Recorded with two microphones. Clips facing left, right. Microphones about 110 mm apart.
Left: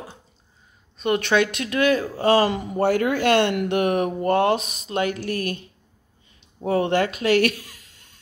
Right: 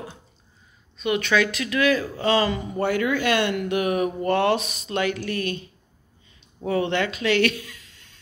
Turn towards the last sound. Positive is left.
turn(degrees=35)  # may be behind; listen again after turning